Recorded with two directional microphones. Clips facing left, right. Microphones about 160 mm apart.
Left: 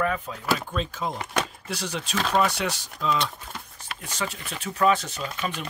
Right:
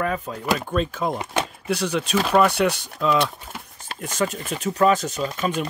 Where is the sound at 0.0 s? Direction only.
40° right (ahead or behind).